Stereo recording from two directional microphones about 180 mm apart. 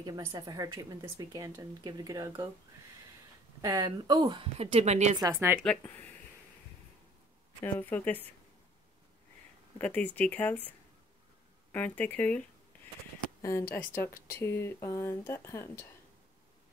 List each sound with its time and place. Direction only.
0.0 s a woman's voice: 20° right (ahead or behind)
3.6 s a woman's voice: 20° right (ahead or behind); by 5.2 s 40° right (ahead or behind)
5.2 s a woman's voice: 10° right (ahead or behind)
5.6 s speech: 10° left (ahead or behind)
7.6 s speech: 10° left (ahead or behind)
9.8 s speech: 10° left (ahead or behind)
11.7 s speech: 10° left (ahead or behind)